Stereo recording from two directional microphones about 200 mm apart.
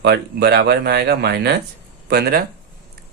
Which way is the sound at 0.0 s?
55° right (ahead or behind).